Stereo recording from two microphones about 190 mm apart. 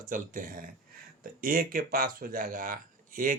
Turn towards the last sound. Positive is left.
turn(degrees=-45)  # may be behind; listen again after turning